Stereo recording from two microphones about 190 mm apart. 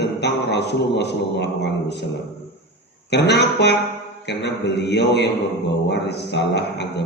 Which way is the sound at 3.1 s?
65° left (ahead or behind).